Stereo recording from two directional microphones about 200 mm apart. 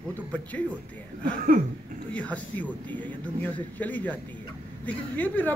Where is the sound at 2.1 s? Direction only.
5° left (ahead or behind).